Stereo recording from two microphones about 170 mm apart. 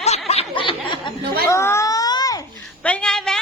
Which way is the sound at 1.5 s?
15° left (ahead or behind).